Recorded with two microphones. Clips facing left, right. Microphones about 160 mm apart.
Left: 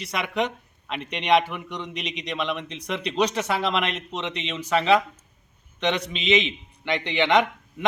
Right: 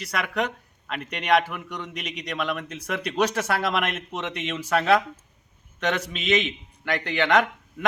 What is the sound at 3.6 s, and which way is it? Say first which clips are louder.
A man's voice: even; 10° right (ahead or behind).